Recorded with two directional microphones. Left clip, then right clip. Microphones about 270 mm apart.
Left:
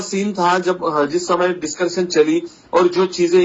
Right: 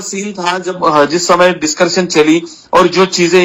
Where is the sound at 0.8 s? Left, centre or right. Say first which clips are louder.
Right 8 dB; right.